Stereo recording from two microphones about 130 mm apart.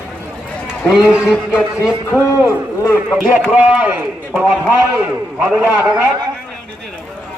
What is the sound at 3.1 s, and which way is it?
Speech, 5° right (ahead or behind).